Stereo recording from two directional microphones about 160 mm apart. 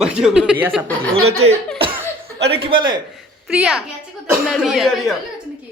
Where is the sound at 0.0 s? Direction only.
5° right (ahead or behind).